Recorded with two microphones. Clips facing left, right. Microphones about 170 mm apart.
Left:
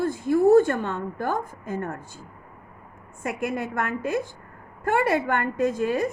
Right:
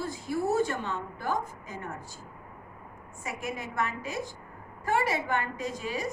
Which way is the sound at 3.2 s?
55° left (ahead or behind).